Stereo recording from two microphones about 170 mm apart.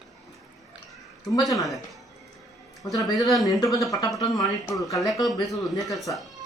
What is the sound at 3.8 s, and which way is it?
Speech, centre (ahead or behind).